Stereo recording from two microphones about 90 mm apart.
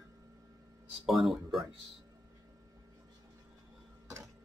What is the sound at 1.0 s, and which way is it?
Speech, centre (ahead or behind).